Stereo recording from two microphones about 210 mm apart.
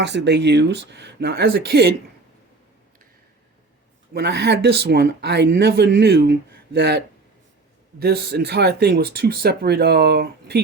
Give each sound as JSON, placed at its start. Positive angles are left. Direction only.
{"t": 0.0, "sound": "speech", "side_deg": -55}
{"t": 4.1, "sound": "speech", "side_deg": -55}